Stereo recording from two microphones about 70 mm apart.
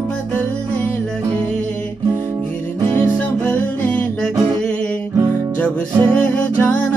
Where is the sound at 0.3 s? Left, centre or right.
Left.